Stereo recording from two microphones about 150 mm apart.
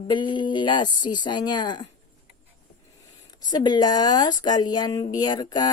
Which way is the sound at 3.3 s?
25° left (ahead or behind).